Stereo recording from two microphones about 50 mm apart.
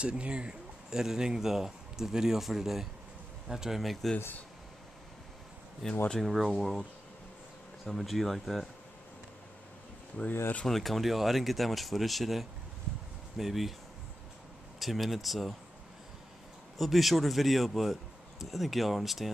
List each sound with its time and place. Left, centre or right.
0.0 s speech: centre
3.8 s speech: centre
5.8 s speech: centre
7.8 s speech: centre
10.7 s speech: centre
14.8 s speech: centre
16.7 s speech: centre